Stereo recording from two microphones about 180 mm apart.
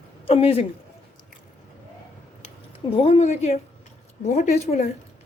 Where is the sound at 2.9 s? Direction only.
35° left (ahead or behind).